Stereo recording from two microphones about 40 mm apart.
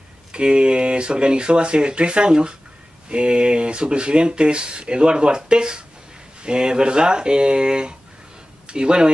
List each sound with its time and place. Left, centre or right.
0.3 s speech: right